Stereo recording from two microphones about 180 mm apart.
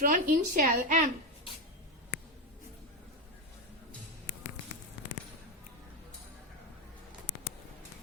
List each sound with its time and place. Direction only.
0.0 s speech: 45° right (ahead or behind)